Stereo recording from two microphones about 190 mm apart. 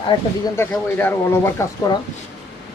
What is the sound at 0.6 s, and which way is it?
Speech, 10° left (ahead or behind).